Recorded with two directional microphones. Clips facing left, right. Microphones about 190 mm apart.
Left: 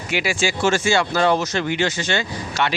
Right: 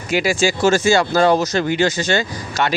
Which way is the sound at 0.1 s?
40° right (ahead or behind).